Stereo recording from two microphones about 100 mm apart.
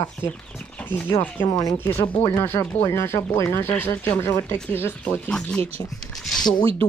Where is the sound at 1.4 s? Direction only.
40° left (ahead or behind).